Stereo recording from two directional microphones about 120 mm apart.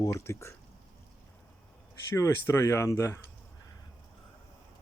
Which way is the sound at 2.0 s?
25° left (ahead or behind).